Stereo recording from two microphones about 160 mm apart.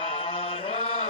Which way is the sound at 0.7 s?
35° left (ahead or behind).